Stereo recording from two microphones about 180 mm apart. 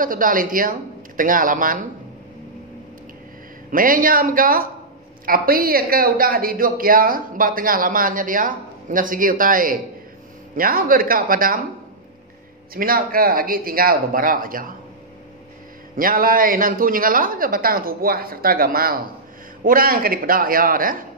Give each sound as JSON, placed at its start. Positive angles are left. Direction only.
{"t": 0.0, "sound": "speech", "side_deg": -50}
{"t": 3.7, "sound": "speech", "side_deg": -50}
{"t": 12.7, "sound": "speech", "side_deg": -55}
{"t": 16.0, "sound": "speech", "side_deg": -50}